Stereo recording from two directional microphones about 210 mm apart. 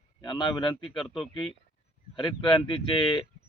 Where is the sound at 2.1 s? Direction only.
20° left (ahead or behind).